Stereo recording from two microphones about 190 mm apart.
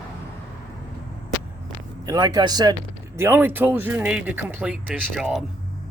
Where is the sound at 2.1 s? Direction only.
20° right (ahead or behind); by 5.4 s 5° right (ahead or behind).